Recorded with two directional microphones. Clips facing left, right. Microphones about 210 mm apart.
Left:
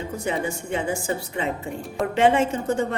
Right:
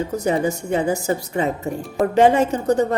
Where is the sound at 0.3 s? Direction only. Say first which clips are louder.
Right 6 dB; 40° right (ahead or behind).